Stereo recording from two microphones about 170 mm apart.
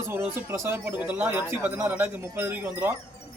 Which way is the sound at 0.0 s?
15° right (ahead or behind).